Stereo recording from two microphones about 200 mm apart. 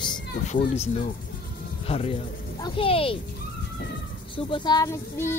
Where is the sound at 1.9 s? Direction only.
30° left (ahead or behind).